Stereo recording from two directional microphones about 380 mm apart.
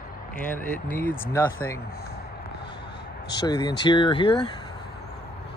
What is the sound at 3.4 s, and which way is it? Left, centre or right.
Speech, centre.